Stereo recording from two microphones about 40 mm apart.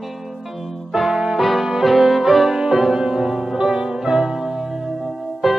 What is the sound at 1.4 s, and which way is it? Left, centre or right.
Music, centre.